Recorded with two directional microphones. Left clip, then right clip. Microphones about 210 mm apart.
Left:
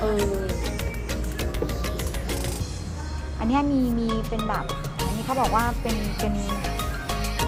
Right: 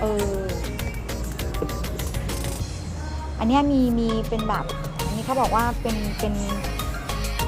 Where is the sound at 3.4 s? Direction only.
15° right (ahead or behind).